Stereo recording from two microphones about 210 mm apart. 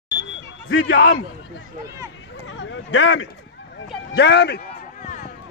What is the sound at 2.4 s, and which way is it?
A man's voice, 60° left (ahead or behind).